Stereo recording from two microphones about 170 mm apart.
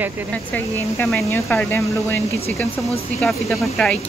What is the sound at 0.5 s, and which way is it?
Speech, 10° left (ahead or behind).